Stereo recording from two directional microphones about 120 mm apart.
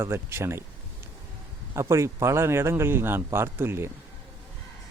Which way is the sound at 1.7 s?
25° right (ahead or behind).